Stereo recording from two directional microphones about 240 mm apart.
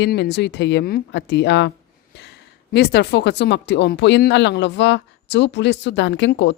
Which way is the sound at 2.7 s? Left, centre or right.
Left.